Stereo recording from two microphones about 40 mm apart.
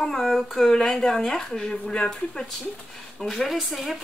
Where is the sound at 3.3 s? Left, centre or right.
Centre.